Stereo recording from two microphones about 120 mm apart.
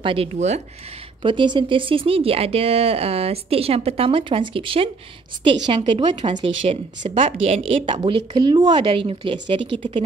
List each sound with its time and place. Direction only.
0.0 s speech: 50° right (ahead or behind)
1.2 s speech: 40° right (ahead or behind)